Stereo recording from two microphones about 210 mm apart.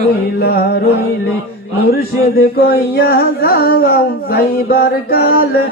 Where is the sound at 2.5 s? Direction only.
45° left (ahead or behind).